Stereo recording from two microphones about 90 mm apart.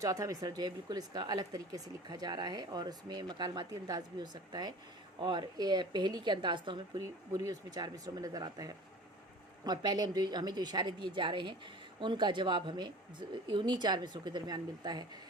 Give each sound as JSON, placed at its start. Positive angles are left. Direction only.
{"t": 0.0, "sound": "a woman's voice", "side_deg": -40}
{"t": 7.0, "sound": "a woman's voice", "side_deg": -40}